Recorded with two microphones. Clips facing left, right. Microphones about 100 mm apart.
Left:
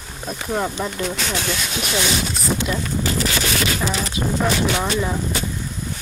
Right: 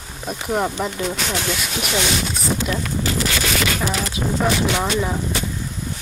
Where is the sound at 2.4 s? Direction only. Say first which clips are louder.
Even; centre (ahead or behind).